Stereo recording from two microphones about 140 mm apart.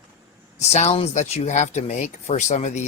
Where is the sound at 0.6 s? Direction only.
50° left (ahead or behind).